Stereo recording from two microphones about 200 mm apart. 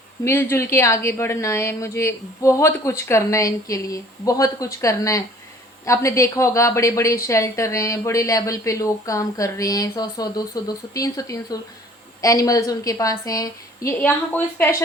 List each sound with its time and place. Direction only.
0.3 s speech: 10° left (ahead or behind)